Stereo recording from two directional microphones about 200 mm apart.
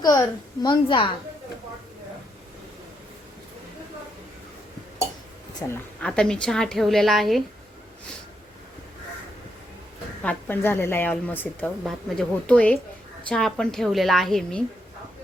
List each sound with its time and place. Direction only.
0.6 s a woman's voice: 20° left (ahead or behind)
5.6 s a woman's voice: 10° left (ahead or behind)
10.2 s a woman's voice: 10° left (ahead or behind)